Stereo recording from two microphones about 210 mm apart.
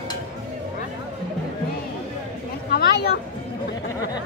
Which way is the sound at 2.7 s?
50° left (ahead or behind).